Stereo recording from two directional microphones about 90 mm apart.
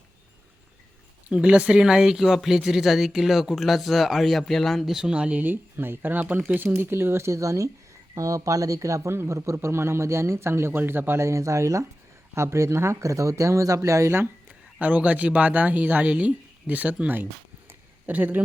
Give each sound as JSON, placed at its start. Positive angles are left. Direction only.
{"t": 1.3, "sound": "speech", "side_deg": -10}
{"t": 14.8, "sound": "speech", "side_deg": -20}